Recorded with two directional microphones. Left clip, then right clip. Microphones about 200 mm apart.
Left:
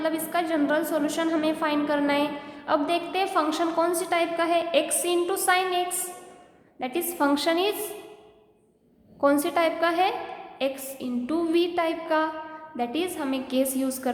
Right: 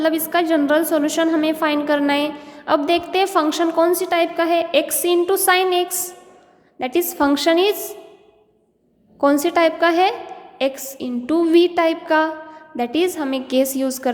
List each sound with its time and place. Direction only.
0.0 s a woman's voice: 35° right (ahead or behind)
9.2 s a woman's voice: 30° right (ahead or behind)